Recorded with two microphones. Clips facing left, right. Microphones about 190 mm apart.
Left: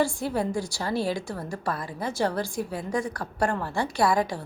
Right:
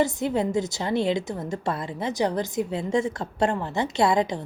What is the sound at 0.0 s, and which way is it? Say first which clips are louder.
A woman's voice: right 2 dB; 20° right (ahead or behind).